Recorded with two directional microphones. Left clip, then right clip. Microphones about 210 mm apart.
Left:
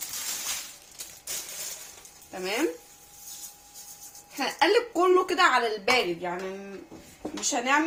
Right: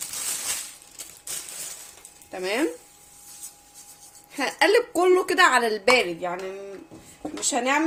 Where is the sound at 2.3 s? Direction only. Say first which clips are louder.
Right 3 dB; 50° right (ahead or behind).